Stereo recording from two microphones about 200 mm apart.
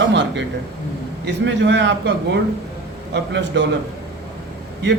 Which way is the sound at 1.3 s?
60° right (ahead or behind).